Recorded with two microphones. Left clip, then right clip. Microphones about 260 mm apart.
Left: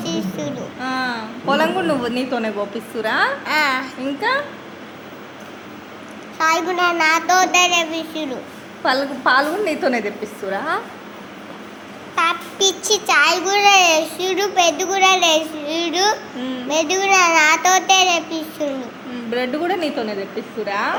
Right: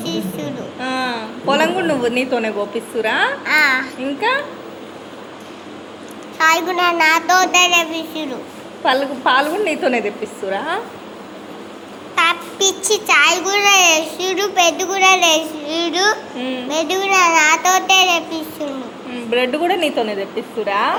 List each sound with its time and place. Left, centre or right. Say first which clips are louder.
0.0 s a woman's voice: right 1 dB; centre
6.4 s a child's voice: right 3 dB; centre
12.1 s a child's voice: right 3 dB; centre